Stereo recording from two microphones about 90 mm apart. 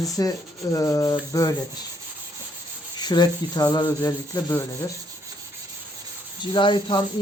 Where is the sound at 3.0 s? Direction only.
50° left (ahead or behind).